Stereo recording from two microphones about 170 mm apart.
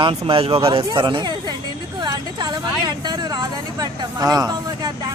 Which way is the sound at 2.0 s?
25° right (ahead or behind).